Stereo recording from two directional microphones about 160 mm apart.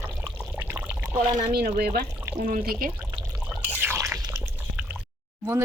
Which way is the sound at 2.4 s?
60° right (ahead or behind).